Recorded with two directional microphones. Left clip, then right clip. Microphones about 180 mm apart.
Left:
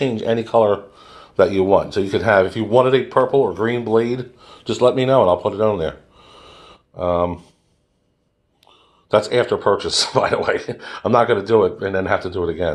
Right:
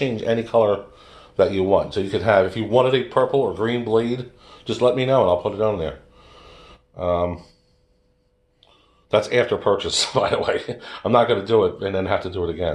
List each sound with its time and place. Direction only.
0.0 s speech: 35° left (ahead or behind)
9.3 s speech: 30° left (ahead or behind)